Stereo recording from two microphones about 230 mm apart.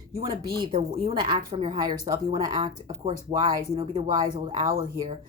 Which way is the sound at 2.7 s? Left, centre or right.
Right.